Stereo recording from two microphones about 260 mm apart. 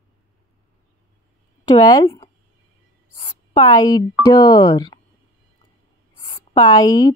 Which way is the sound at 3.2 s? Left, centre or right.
Centre.